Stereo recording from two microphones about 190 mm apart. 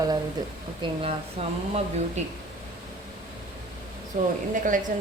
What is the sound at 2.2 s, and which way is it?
Speech, 35° right (ahead or behind).